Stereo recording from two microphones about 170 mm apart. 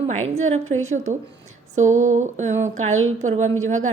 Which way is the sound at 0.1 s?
45° right (ahead or behind).